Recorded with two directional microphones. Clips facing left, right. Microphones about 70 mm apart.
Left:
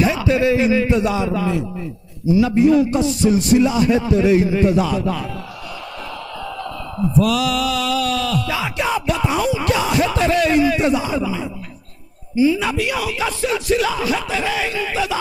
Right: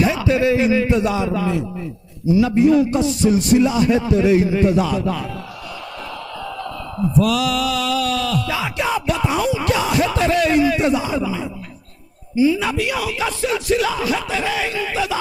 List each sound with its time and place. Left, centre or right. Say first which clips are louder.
0.0 s music: even; left
7.2 s music: even; centre